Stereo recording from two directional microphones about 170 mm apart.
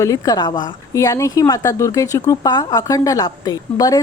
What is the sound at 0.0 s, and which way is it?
A woman's voice, 20° left (ahead or behind).